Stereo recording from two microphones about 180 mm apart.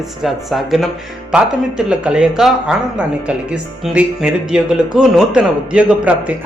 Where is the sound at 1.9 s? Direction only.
5° right (ahead or behind).